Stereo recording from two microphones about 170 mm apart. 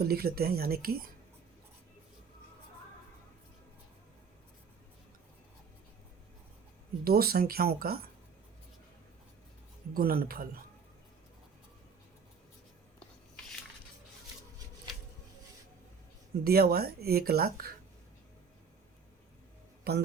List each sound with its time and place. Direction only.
0.0 s speech: 65° right (ahead or behind)
7.0 s speech: 60° right (ahead or behind)
9.9 s speech: 60° right (ahead or behind)
16.3 s speech: 65° right (ahead or behind)
19.8 s a man's voice: 70° right (ahead or behind)